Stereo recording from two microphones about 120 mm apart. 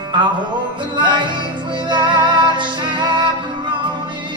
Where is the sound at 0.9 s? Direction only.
40° right (ahead or behind).